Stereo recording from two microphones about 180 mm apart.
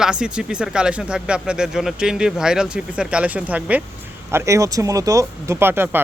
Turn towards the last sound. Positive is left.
turn(degrees=-10)  # may be behind; listen again after turning